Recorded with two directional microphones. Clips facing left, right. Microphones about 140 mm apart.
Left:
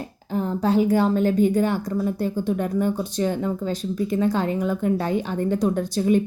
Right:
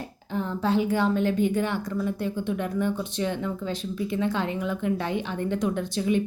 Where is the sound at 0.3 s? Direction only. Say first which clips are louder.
Left 4 dB; 40° left (ahead or behind).